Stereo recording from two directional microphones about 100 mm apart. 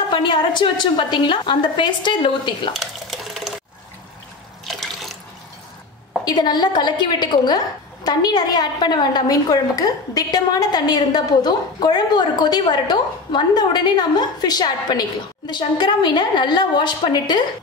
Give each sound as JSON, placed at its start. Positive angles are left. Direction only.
{"t": 0.1, "sound": "a woman's voice", "side_deg": 50}
{"t": 2.8, "sound": "sewing machine", "side_deg": 0}
{"t": 4.6, "sound": "water", "side_deg": 0}
{"t": 6.2, "sound": "a woman's voice", "side_deg": 45}